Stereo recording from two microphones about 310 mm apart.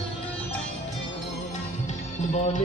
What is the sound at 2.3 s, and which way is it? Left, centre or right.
Music, left.